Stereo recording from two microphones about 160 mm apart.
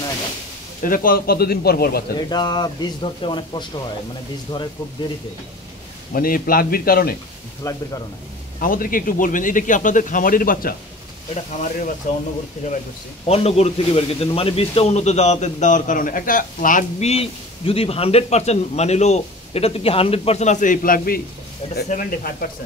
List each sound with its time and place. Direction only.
0.8 s speech: 60° left (ahead or behind)
2.1 s speech: 25° left (ahead or behind)
6.1 s speech: 65° left (ahead or behind)
7.6 s speech: 20° left (ahead or behind)
8.5 s a man's voice: 60° left (ahead or behind)
12.1 s a man's voice: 55° left (ahead or behind)
13.3 s a man's voice: 40° left (ahead or behind); by 17.1 s 55° left (ahead or behind)
17.1 s a man's voice: 40° left (ahead or behind); by 22.5 s 60° left (ahead or behind)